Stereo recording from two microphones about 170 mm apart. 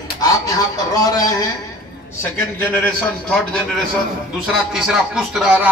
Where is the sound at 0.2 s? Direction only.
20° left (ahead or behind).